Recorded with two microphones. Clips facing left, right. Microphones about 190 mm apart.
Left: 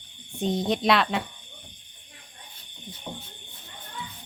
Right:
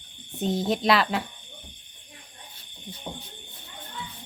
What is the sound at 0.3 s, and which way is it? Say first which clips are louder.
Speech: even; centre (ahead or behind).